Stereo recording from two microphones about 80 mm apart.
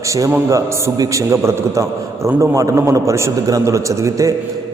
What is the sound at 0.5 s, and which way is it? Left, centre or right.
A man's voice, right.